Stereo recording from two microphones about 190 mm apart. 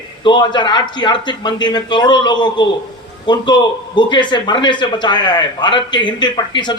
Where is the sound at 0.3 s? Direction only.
25° left (ahead or behind).